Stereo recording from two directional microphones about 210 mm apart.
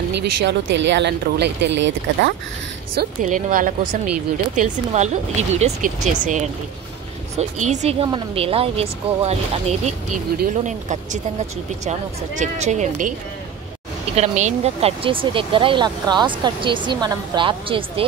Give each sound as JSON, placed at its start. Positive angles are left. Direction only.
{"t": 0.2, "sound": "speech", "side_deg": -60}
{"t": 3.0, "sound": "speech", "side_deg": -40}
{"t": 7.6, "sound": "speech", "side_deg": -35}
{"t": 14.1, "sound": "speech", "side_deg": -35}